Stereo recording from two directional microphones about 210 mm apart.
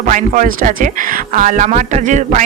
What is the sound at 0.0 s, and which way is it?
Speech, 40° right (ahead or behind).